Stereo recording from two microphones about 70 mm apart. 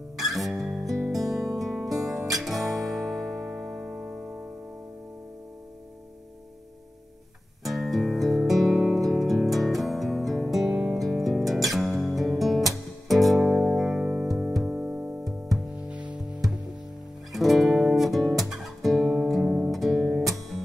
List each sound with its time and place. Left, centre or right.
0.2 s music: centre
7.6 s music: centre
17.3 s music: centre